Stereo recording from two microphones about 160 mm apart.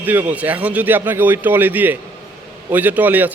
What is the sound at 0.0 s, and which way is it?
A man's voice, 10° right (ahead or behind).